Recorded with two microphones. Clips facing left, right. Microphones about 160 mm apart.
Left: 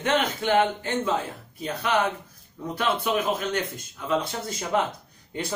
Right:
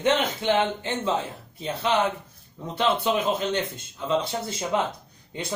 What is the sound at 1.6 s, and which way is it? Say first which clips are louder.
A man's voice: right 1 dB; 25° right (ahead or behind).